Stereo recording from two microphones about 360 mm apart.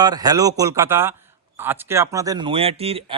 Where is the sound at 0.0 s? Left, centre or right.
Centre.